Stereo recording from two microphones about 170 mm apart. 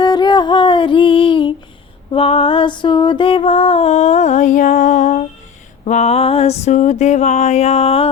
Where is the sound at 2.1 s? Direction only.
35° left (ahead or behind).